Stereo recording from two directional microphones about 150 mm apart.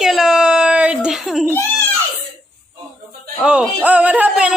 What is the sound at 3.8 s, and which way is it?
Music, 10° right (ahead or behind).